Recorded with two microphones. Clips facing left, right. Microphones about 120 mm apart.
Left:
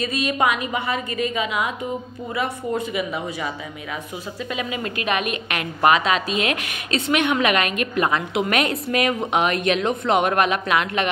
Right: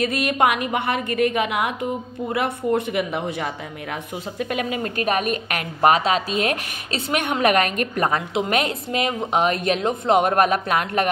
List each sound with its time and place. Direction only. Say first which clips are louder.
0.0 s a woman's voice: right 2 dB; 60° right (ahead or behind)
4.4 s a woman's voice: right 3 dB; 55° right (ahead or behind)